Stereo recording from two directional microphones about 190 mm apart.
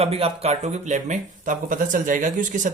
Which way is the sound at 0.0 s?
30° right (ahead or behind).